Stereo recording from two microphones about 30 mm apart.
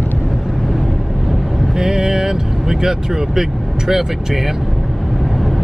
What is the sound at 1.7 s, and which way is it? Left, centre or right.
Vehicle, centre.